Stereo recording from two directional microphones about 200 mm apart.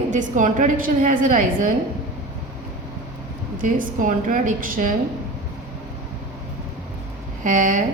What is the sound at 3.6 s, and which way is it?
A woman's voice, 40° right (ahead or behind).